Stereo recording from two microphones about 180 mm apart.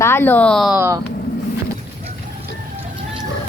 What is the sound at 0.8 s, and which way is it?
Speech, 15° right (ahead or behind).